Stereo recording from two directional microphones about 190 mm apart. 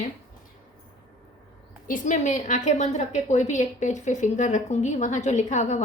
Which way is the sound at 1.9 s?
40° left (ahead or behind).